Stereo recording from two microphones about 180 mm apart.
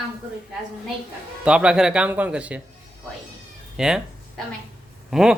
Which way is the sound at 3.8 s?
5° right (ahead or behind).